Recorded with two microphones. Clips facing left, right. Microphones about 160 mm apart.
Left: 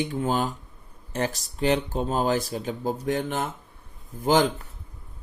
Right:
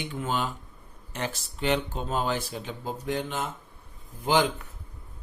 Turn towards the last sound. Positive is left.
turn(degrees=40)  # may be behind; listen again after turning